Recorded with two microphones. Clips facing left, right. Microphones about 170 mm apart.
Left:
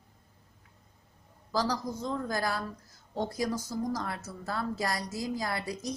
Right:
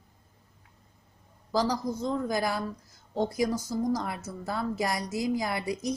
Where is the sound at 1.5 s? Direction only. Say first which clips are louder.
Right 3 dB; 15° right (ahead or behind).